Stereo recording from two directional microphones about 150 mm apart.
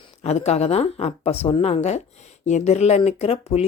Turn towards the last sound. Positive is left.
turn(degrees=45)  # may be behind; listen again after turning